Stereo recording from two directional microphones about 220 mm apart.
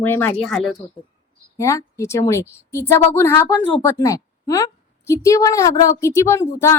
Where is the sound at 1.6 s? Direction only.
15° left (ahead or behind).